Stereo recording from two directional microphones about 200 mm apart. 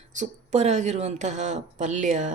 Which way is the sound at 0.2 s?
35° right (ahead or behind).